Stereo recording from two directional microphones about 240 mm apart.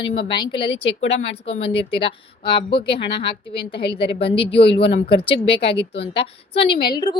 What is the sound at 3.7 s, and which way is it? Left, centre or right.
Speech, left.